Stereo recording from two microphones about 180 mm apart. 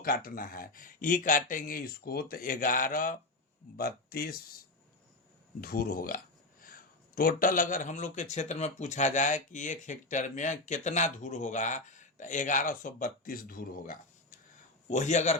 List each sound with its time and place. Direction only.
0.0 s a man's voice: 55° left (ahead or behind); by 15.4 s 40° left (ahead or behind)